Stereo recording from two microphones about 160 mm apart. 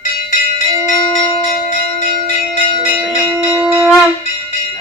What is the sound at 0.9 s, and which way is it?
Bell, 25° left (ahead or behind).